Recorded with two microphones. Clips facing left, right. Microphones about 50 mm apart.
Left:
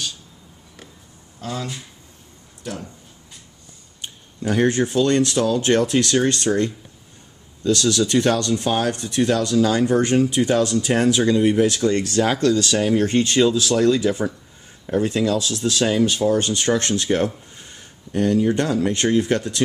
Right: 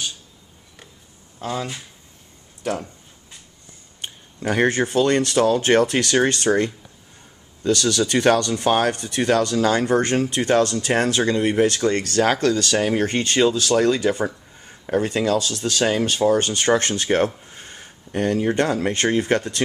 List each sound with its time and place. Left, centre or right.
1.4 s speech: right
2.6 s speech: right
4.5 s speech: centre
12.7 s speech: centre
13.0 s speech: centre